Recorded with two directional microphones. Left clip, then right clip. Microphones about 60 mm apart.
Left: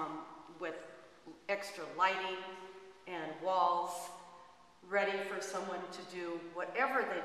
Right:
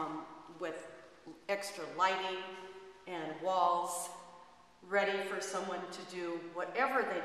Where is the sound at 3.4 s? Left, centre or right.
Right.